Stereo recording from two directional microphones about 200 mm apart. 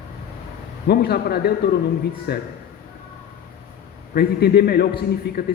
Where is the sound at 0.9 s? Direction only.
50° left (ahead or behind).